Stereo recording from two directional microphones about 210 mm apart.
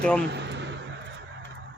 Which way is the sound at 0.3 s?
55° right (ahead or behind).